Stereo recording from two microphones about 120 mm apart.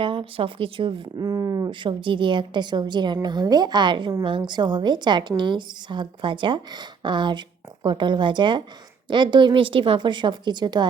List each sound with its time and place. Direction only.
0.0 s speech: 45° right (ahead or behind)
1.2 s speech: 30° right (ahead or behind)